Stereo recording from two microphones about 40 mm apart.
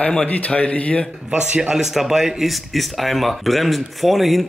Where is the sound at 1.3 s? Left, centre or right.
Right.